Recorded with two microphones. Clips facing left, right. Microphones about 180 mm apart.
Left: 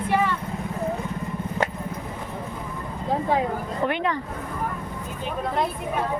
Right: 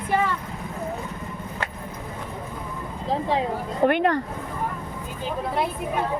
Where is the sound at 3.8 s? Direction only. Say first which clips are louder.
Right 6 dB; 55° right (ahead or behind).